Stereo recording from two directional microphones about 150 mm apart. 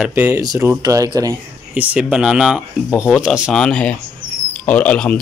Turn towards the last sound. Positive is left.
turn(degrees=10)  # may be behind; listen again after turning